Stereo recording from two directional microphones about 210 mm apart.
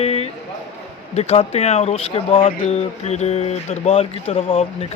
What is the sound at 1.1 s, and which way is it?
Speech, 30° left (ahead or behind).